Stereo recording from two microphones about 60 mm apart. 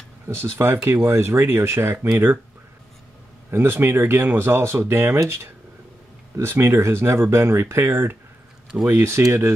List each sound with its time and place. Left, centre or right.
0.3 s speech: right
3.4 s speech: right